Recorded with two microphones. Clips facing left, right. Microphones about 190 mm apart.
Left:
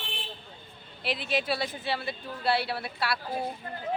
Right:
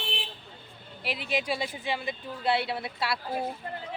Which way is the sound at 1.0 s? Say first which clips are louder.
Left 1 dB; 10° right (ahead or behind).